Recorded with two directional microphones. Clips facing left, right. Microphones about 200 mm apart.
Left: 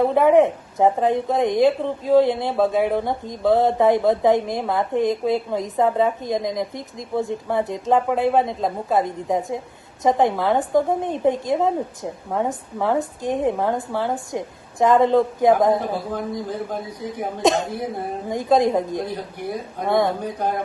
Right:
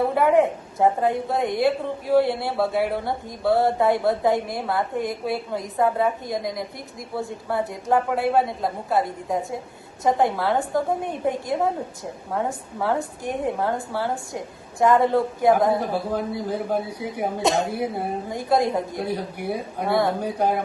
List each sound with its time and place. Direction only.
0.1 s a woman's voice: 20° left (ahead or behind)
16.1 s speech: 10° right (ahead or behind)
18.3 s a woman's voice: 20° left (ahead or behind)
18.9 s speech: 10° right (ahead or behind)